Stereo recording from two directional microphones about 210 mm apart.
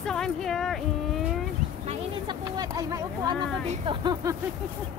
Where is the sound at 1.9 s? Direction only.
20° right (ahead or behind).